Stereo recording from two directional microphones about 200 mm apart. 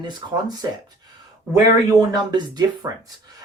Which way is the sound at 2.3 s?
20° right (ahead or behind).